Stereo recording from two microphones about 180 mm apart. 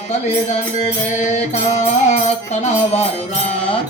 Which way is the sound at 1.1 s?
40° left (ahead or behind).